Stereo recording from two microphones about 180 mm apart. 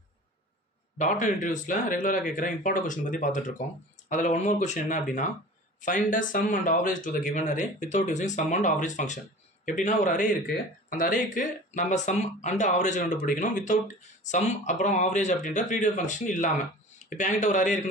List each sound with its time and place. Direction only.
0.9 s speech: 45° left (ahead or behind)